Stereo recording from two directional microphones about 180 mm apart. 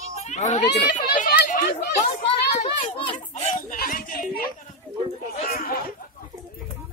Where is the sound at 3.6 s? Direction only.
50° left (ahead or behind).